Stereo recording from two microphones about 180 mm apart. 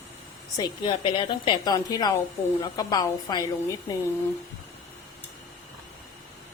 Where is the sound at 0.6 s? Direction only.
30° left (ahead or behind).